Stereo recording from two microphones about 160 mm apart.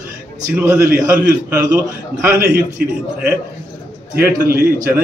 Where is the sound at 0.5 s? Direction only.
10° right (ahead or behind).